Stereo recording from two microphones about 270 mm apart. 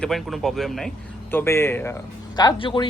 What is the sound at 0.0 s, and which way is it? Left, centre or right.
A man's voice, centre.